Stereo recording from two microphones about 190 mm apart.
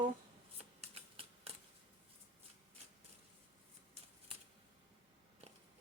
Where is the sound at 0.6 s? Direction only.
35° right (ahead or behind).